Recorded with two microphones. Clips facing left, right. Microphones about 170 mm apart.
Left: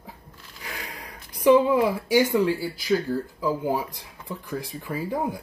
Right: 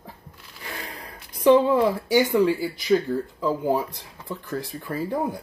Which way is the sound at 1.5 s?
10° left (ahead or behind).